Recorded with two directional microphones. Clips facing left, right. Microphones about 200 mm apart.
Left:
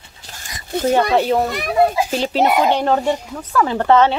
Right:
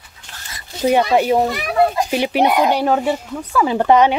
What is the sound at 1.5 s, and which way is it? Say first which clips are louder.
Speech: even; centre (ahead or behind).